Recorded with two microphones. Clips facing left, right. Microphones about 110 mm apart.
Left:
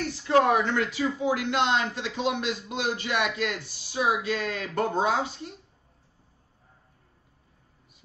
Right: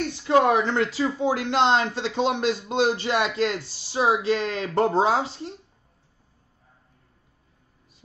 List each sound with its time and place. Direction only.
0.0 s speech: 20° right (ahead or behind)